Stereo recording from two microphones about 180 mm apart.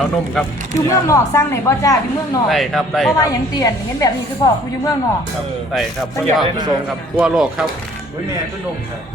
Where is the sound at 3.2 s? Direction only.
20° left (ahead or behind).